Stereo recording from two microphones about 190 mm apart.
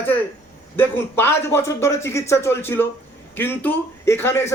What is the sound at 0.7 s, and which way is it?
A man's voice, 10° left (ahead or behind).